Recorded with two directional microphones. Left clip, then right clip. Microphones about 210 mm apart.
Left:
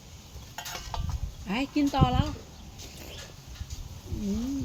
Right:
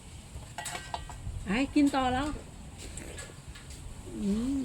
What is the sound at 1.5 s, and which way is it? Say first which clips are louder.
Speech: right 1 dB; 10° left (ahead or behind).